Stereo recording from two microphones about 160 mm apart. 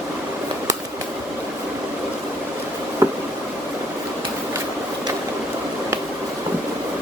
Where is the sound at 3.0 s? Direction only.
20° right (ahead or behind).